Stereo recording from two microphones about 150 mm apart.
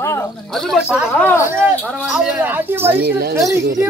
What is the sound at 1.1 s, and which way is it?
Speech, 15° left (ahead or behind).